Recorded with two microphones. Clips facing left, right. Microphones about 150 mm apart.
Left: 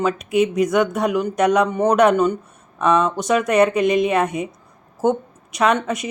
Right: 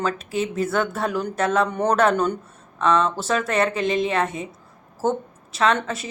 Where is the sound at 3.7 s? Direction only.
25° right (ahead or behind).